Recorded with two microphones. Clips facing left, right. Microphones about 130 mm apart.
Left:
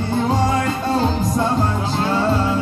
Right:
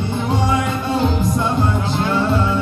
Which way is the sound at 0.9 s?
40° left (ahead or behind).